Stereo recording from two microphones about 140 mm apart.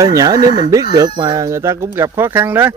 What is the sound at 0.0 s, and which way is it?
Speech, 25° right (ahead or behind).